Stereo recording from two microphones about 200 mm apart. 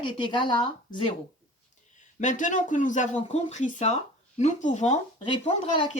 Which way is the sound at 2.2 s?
40° left (ahead or behind).